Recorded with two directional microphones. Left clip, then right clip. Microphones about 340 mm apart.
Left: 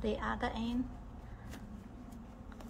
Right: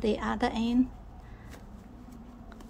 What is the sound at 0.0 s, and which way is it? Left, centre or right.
Speech, right.